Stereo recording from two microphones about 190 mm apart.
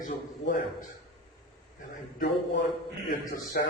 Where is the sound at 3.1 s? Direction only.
50° left (ahead or behind).